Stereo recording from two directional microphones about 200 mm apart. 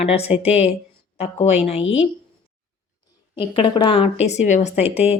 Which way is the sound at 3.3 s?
25° left (ahead or behind).